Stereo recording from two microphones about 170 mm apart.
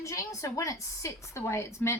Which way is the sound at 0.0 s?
20° left (ahead or behind).